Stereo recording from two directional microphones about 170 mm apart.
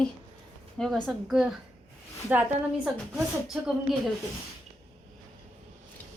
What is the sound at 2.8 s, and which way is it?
Speech, 5° right (ahead or behind).